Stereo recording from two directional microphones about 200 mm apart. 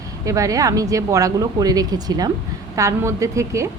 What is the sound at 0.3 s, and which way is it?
Speech, 15° right (ahead or behind).